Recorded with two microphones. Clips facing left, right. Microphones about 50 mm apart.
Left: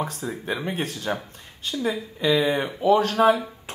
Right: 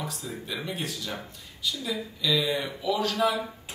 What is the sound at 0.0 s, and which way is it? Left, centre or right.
Speech, left.